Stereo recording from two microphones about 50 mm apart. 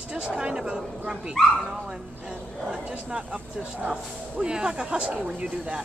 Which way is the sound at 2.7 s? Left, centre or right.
Right.